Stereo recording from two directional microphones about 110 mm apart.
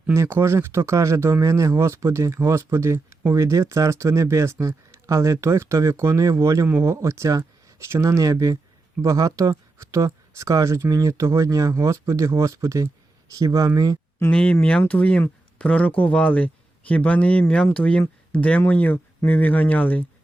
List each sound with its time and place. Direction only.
0.1 s speech: 25° right (ahead or behind)
14.3 s speech: 10° left (ahead or behind)